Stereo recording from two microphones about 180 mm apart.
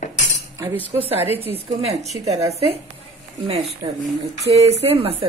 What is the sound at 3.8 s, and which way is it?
Speech, 30° right (ahead or behind).